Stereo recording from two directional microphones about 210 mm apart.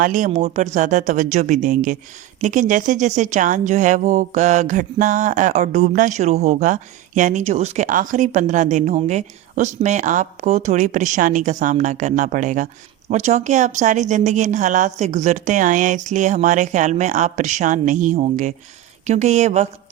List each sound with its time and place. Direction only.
0.0 s speech: 40° right (ahead or behind)